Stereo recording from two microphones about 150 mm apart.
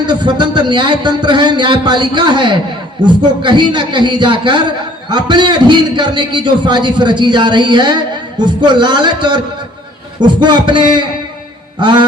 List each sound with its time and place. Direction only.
0.0 s a man's voice: 30° right (ahead or behind)